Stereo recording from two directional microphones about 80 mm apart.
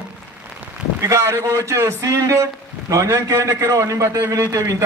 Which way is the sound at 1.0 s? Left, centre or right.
Right.